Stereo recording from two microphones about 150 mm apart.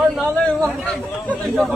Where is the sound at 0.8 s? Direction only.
5° left (ahead or behind).